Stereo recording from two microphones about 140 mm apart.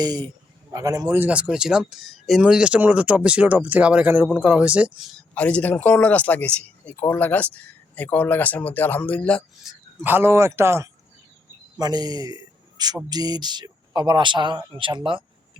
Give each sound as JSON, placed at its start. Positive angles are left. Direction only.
{"t": 0.0, "sound": "speech", "side_deg": -30}
{"t": 5.3, "sound": "speech", "side_deg": 10}
{"t": 9.6, "sound": "a man's voice", "side_deg": -15}